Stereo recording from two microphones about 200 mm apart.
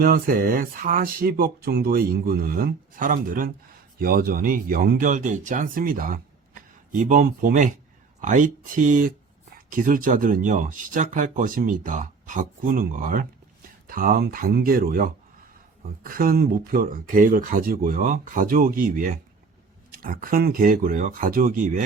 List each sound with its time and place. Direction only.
0.0 s speech: 45° right (ahead or behind)